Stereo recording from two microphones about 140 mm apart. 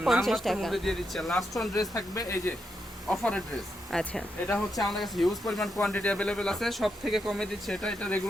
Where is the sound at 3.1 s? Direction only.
10° left (ahead or behind).